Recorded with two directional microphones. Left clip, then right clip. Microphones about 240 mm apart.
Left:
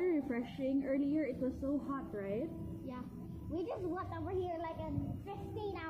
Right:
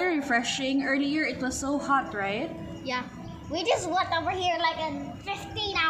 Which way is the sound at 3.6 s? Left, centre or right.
Right.